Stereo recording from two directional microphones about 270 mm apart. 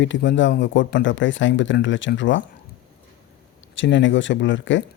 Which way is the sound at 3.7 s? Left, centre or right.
Left.